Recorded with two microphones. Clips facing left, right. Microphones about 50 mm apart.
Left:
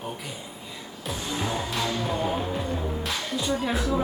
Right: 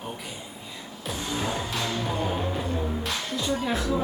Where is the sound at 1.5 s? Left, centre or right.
Centre.